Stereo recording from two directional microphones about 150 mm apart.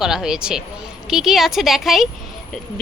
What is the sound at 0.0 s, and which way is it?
A woman's voice, 5° right (ahead or behind).